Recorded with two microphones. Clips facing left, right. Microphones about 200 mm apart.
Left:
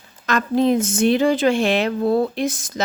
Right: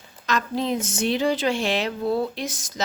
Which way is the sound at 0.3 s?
55° left (ahead or behind).